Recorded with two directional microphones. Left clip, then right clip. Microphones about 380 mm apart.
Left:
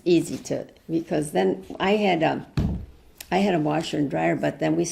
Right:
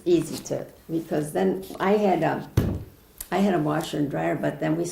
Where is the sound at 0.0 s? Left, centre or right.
Left.